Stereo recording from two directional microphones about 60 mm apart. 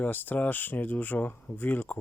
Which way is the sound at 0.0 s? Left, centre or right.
Left.